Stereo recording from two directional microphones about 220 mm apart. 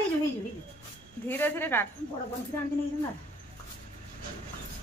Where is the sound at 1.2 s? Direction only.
10° left (ahead or behind).